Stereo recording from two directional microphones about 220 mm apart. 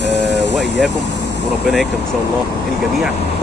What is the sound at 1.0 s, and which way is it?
Vehicle, 50° left (ahead or behind).